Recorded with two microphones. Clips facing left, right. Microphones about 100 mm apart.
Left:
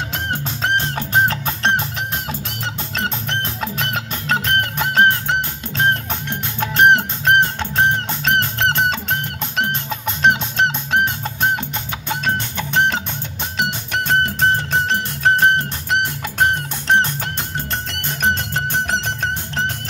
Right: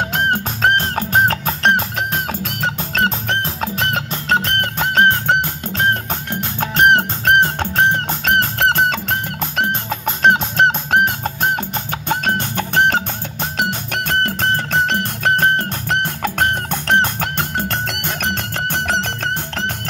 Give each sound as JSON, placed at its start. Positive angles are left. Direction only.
{"t": 0.1, "sound": "music", "side_deg": -50}
{"t": 6.6, "sound": "music", "side_deg": -40}